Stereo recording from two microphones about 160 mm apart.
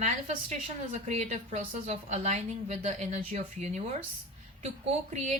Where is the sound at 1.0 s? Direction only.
45° right (ahead or behind).